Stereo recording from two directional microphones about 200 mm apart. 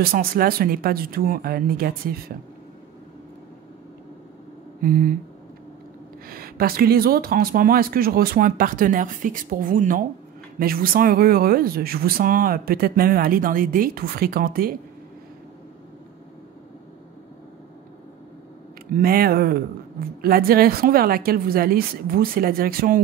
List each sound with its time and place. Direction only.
0.0 s speech: 50° right (ahead or behind)
4.8 s speech: 45° right (ahead or behind)
6.2 s speech: 50° right (ahead or behind)
18.9 s speech: 45° right (ahead or behind)